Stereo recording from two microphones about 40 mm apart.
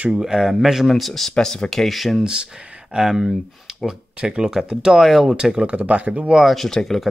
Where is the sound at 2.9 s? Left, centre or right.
Centre.